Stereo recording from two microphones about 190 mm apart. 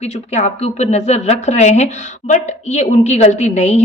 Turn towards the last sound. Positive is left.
turn(degrees=35)  # may be behind; listen again after turning